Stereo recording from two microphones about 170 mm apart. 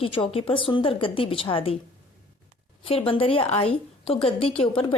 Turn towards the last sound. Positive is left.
turn(degrees=30)  # may be behind; listen again after turning